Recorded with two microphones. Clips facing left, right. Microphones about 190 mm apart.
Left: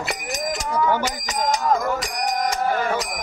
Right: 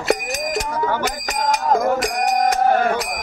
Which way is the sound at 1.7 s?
50° right (ahead or behind).